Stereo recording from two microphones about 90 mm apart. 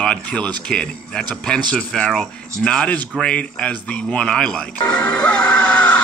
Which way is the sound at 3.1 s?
10° left (ahead or behind).